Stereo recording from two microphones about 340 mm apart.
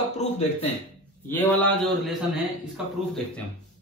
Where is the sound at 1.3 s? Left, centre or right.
Centre.